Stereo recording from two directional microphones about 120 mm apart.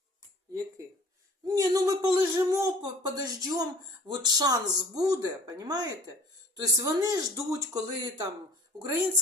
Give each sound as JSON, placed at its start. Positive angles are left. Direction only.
{"t": 1.5, "sound": "speech", "side_deg": -30}